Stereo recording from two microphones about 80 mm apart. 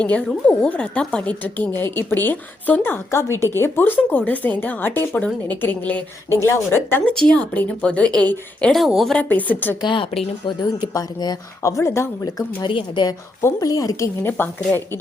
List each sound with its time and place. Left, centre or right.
0.0 s a woman's voice: centre
7.3 s a woman's voice: centre
8.9 s speech: centre
9.1 s a woman's voice: left
10.4 s speech: left
10.9 s speech: left
11.7 s speech: left
12.6 s a woman's voice: left
13.6 s speech: left
14.2 s a woman's voice: left